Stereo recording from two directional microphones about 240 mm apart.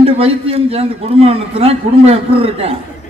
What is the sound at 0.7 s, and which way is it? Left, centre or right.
A man's voice, right.